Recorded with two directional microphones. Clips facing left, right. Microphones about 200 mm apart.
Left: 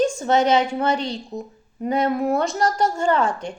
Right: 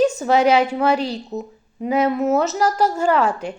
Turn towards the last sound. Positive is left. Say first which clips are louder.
# right 2 dB
turn(degrees=-5)  # may be behind; listen again after turning